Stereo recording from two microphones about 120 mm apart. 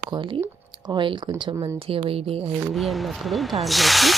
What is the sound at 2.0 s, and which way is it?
Speech, 55° right (ahead or behind).